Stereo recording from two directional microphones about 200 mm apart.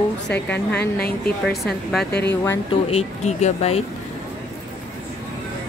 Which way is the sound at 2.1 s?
55° left (ahead or behind).